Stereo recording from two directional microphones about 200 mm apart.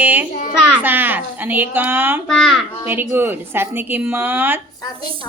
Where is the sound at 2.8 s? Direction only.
10° right (ahead or behind).